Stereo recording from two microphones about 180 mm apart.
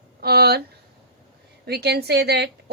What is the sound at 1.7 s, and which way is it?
Speech, 65° right (ahead or behind).